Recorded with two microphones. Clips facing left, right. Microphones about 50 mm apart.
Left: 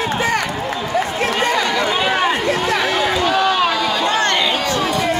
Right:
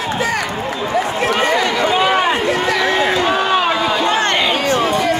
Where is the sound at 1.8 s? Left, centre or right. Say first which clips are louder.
Right 3 dB; centre.